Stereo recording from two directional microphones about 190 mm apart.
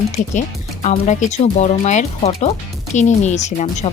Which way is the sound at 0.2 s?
40° left (ahead or behind).